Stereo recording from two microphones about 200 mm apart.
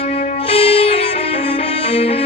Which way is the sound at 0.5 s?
30° left (ahead or behind).